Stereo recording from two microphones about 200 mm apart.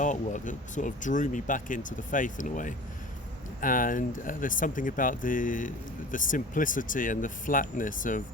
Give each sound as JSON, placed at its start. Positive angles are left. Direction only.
{"t": 0.0, "sound": "speech", "side_deg": 40}